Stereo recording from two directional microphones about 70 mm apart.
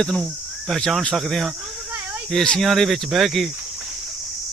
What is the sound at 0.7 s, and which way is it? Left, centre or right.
Speech, centre.